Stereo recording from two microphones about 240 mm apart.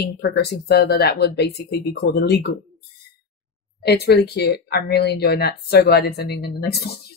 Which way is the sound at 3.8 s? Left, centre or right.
Left.